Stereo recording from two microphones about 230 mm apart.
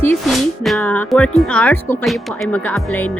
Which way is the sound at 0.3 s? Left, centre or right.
Centre.